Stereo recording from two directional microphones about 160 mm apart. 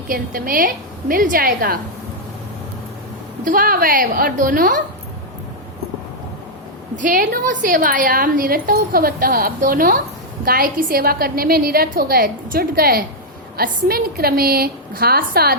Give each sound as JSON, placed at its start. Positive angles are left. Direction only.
{"t": 0.1, "sound": "a woman's voice", "side_deg": -60}
{"t": 3.4, "sound": "a woman's voice", "side_deg": -60}
{"t": 7.0, "sound": "a woman's voice", "side_deg": -55}